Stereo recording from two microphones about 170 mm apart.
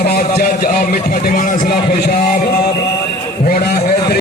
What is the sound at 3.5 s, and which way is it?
Speech, 65° left (ahead or behind).